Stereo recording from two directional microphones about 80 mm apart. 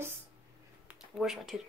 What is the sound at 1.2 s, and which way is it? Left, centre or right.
Speech, centre.